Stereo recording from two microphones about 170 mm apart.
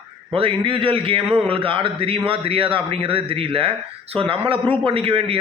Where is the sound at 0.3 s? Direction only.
30° right (ahead or behind).